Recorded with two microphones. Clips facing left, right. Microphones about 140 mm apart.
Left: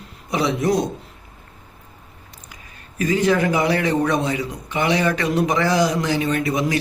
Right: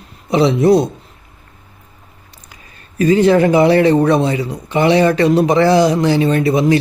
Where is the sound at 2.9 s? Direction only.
30° right (ahead or behind).